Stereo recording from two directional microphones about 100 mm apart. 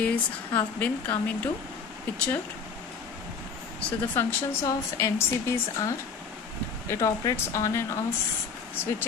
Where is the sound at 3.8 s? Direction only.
20° left (ahead or behind).